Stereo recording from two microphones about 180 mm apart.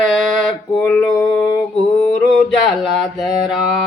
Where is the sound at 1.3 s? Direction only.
20° left (ahead or behind).